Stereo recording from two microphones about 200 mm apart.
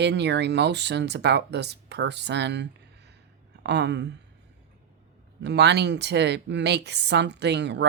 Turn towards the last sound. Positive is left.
turn(degrees=-60)  # may be behind; listen again after turning